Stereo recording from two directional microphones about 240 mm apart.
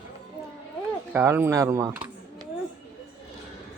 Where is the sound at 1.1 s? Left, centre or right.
Centre.